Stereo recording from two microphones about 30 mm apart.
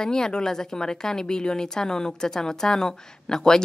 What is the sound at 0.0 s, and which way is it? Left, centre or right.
Speech, left.